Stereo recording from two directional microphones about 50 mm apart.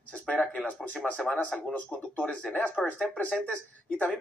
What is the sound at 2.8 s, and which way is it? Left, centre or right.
Speech, centre.